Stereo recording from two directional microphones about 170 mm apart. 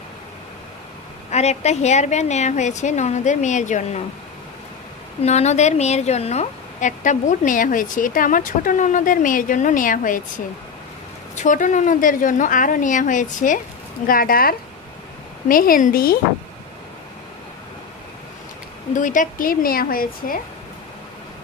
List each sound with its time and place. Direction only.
1.3 s a woman's voice: 40° left (ahead or behind)
5.2 s a woman's voice: 40° left (ahead or behind)
11.3 s a woman's voice: 50° left (ahead or behind)
18.9 s a woman's voice: 50° left (ahead or behind)